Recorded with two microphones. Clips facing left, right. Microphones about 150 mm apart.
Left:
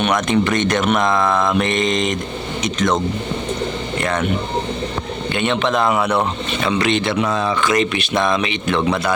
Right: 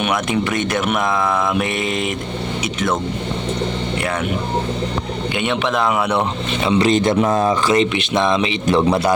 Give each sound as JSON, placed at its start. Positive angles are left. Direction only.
{"t": 0.0, "sound": "speech", "side_deg": -5}
{"t": 5.3, "sound": "speech", "side_deg": -10}
{"t": 6.7, "sound": "speech", "side_deg": -25}
{"t": 6.9, "sound": "speech", "side_deg": -40}
{"t": 7.4, "sound": "speech", "side_deg": -25}
{"t": 8.6, "sound": "a man's voice", "side_deg": -35}